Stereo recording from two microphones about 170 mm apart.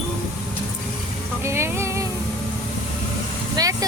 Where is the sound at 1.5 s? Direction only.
15° right (ahead or behind).